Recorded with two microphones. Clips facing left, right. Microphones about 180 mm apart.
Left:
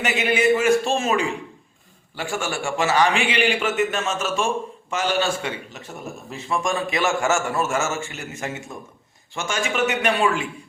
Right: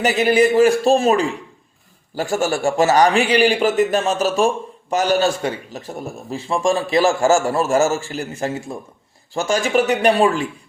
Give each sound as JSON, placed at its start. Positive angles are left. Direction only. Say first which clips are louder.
{"t": 0.0, "sound": "a man's voice", "louder": "right 6 dB", "side_deg": -35}